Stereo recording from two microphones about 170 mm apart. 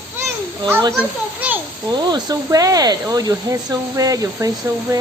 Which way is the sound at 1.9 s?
25° right (ahead or behind).